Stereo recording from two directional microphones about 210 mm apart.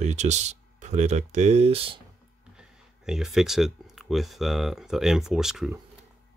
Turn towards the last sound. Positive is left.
turn(degrees=0)  # may be behind; listen again after turning